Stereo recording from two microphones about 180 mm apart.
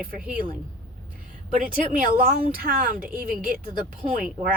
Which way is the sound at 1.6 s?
50° right (ahead or behind).